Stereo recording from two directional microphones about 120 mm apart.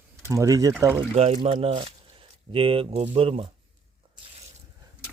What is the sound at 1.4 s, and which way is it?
Speech, 50° right (ahead or behind).